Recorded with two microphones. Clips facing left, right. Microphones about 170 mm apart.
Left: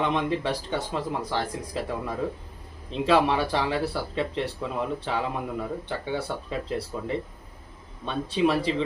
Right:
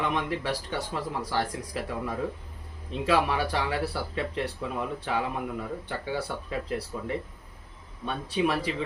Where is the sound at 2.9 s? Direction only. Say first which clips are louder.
Left 4 dB; 25° left (ahead or behind).